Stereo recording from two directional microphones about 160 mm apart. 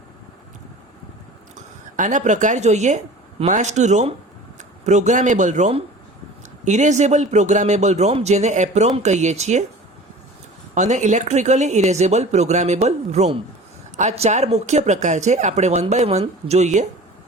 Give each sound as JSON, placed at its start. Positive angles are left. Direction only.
{"t": 1.5, "sound": "speech", "side_deg": -50}
{"t": 10.8, "sound": "speech", "side_deg": -50}